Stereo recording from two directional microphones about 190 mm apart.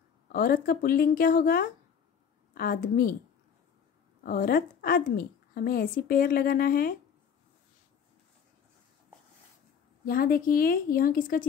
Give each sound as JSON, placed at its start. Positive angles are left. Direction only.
{"t": 0.3, "sound": "a woman's voice", "side_deg": 50}
{"t": 4.2, "sound": "a woman's voice", "side_deg": 50}
{"t": 10.0, "sound": "a woman's voice", "side_deg": 50}